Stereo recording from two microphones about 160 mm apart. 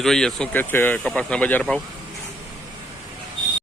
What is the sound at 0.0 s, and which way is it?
Speech, 5° left (ahead or behind).